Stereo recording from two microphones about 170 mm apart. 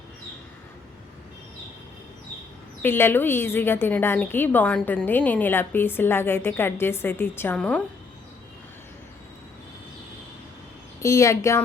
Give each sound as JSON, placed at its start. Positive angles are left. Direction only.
{"t": 2.8, "sound": "a woman's voice", "side_deg": 15}
{"t": 11.0, "sound": "a woman's voice", "side_deg": 20}